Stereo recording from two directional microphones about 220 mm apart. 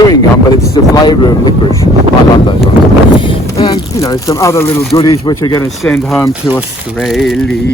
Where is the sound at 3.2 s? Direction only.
25° left (ahead or behind).